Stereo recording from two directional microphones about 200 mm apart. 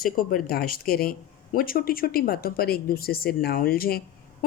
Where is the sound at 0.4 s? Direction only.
45° left (ahead or behind).